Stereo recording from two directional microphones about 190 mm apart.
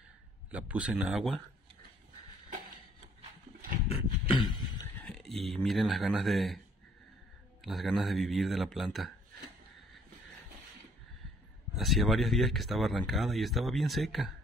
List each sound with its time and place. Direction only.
0.5 s speech: 5° right (ahead or behind)
3.9 s a sound: 25° left (ahead or behind)
5.0 s speech: centre (ahead or behind)
7.6 s speech: centre (ahead or behind)
11.7 s speech: centre (ahead or behind)